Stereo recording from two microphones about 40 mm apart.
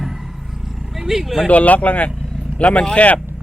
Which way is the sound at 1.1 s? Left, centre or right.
Centre.